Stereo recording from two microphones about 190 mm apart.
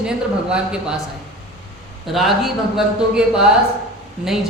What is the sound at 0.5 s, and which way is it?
Speech, 5° right (ahead or behind).